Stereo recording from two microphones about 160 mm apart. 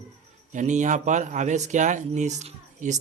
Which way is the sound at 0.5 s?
50° right (ahead or behind).